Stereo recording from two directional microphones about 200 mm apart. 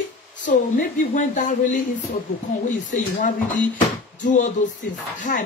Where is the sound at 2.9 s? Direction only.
40° left (ahead or behind).